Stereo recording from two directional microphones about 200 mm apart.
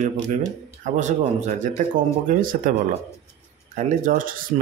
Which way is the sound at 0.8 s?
35° right (ahead or behind).